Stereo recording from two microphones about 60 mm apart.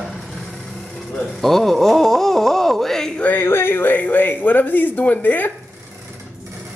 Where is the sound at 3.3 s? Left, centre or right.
Left.